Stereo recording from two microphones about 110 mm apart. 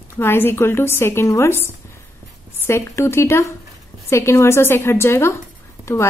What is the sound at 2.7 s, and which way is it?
A woman's voice, 25° left (ahead or behind).